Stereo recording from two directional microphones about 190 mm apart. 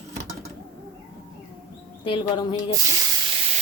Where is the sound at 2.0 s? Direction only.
25° left (ahead or behind).